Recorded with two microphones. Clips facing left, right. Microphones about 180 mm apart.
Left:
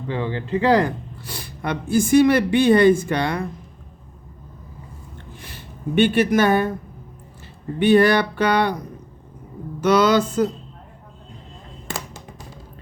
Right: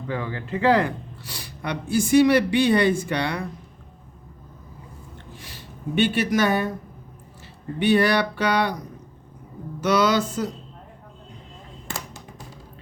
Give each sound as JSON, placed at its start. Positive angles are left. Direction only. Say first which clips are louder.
{"t": 0.1, "sound": "speech", "louder": "left 5 dB", "side_deg": 25}
{"t": 5.9, "sound": "speech", "louder": "left 4 dB", "side_deg": 55}
{"t": 7.8, "sound": "speech", "louder": "left 4 dB", "side_deg": 50}
{"t": 9.8, "sound": "speech", "louder": "left 4 dB", "side_deg": 50}